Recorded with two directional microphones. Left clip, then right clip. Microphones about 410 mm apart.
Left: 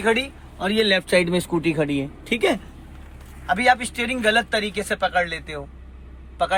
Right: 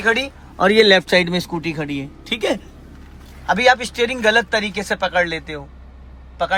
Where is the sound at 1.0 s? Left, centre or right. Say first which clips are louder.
Right 3 dB; centre.